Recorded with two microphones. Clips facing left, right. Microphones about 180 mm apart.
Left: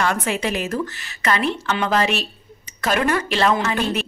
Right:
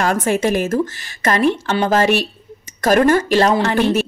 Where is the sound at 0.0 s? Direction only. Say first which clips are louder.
Right 5 dB; 40° right (ahead or behind).